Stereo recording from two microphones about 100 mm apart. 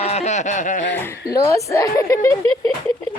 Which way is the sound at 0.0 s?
90° left.